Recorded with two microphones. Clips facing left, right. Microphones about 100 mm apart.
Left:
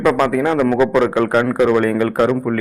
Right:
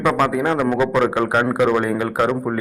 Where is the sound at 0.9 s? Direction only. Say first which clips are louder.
Left 3 dB; 5° right (ahead or behind).